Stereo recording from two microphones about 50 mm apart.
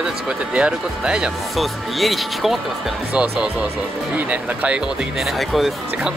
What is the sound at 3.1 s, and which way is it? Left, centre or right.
Speech, right.